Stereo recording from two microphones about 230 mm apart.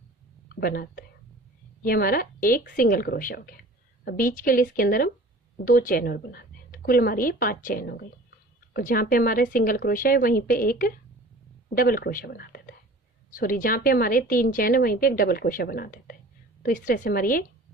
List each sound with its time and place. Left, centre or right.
0.6 s a woman's voice: left